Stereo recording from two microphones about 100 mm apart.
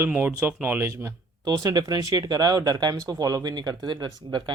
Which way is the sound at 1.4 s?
40° right (ahead or behind).